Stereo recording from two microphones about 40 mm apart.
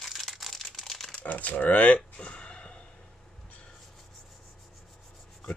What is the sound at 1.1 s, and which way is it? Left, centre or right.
Speech, left.